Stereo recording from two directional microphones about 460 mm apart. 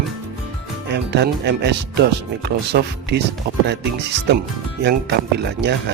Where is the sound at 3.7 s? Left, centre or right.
Right.